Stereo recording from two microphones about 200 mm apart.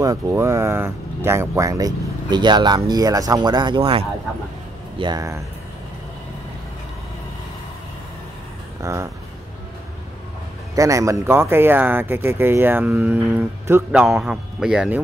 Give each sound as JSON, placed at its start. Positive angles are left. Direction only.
{"t": 0.0, "sound": "speech", "side_deg": -15}
{"t": 8.8, "sound": "speech", "side_deg": -15}
{"t": 10.7, "sound": "speech", "side_deg": -15}